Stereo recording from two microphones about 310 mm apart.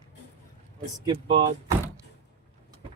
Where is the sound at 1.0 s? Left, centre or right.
Right.